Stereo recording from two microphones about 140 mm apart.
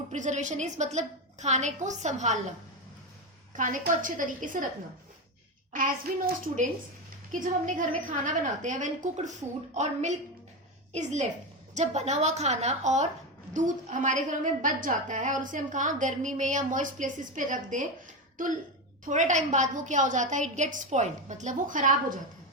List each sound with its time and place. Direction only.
0.1 s a woman's voice: 60° right (ahead or behind)
3.5 s a woman's voice: 65° right (ahead or behind)
5.7 s a woman's voice: 75° right (ahead or behind)
19.0 s a woman's voice: 65° right (ahead or behind)